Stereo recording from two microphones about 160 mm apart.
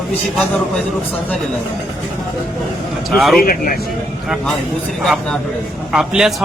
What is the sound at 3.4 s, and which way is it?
Speech, 65° left (ahead or behind).